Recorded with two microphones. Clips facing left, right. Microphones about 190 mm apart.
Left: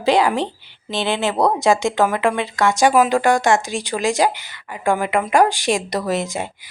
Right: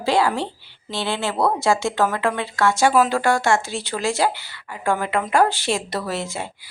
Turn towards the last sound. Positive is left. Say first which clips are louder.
# left 5 dB
turn(degrees=15)  # may be behind; listen again after turning